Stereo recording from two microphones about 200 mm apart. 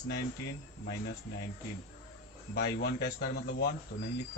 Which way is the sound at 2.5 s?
55° left (ahead or behind).